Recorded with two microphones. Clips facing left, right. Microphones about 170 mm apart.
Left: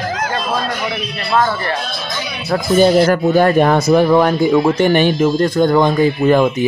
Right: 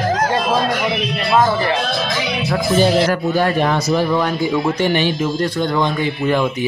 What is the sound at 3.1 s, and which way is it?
A man's voice, 50° left (ahead or behind).